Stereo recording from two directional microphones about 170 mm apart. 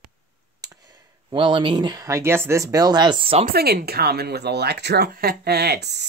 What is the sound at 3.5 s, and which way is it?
Speech, 65° right (ahead or behind).